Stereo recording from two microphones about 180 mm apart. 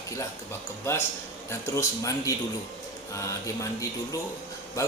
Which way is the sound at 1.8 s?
20° left (ahead or behind).